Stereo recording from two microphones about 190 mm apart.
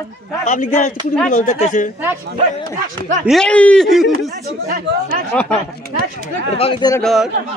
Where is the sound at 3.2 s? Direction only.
5° left (ahead or behind).